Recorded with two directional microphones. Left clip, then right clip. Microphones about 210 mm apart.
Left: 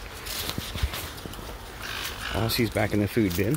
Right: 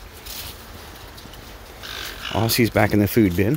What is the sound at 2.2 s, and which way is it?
Speech, 45° right (ahead or behind).